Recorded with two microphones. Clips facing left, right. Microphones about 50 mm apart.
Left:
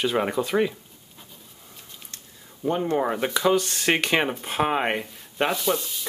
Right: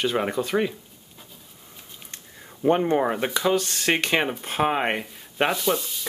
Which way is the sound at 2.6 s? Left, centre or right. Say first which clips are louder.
Right 5 dB; right.